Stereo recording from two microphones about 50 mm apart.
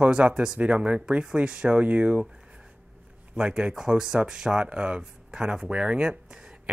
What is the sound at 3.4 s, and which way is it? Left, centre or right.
Speech, centre.